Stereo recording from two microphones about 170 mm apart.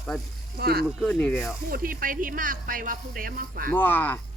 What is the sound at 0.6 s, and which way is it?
Speech, 65° right (ahead or behind).